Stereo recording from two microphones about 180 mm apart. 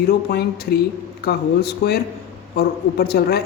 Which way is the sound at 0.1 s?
60° left (ahead or behind).